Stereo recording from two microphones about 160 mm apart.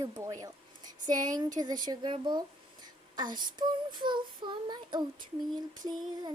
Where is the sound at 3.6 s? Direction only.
30° right (ahead or behind).